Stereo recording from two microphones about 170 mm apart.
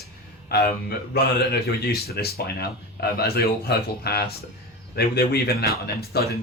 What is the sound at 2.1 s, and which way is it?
A man's voice, 65° left (ahead or behind).